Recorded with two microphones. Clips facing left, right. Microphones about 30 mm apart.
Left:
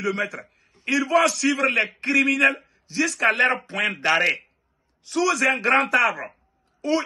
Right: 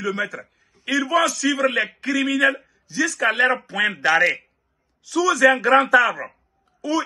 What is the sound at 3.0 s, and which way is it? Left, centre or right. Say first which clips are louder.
Speech: right 1 dB; centre.